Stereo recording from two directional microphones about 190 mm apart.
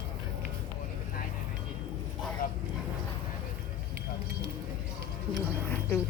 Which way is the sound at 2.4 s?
50° left (ahead or behind).